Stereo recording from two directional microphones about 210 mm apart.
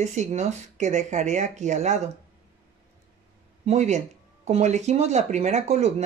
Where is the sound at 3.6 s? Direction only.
35° right (ahead or behind).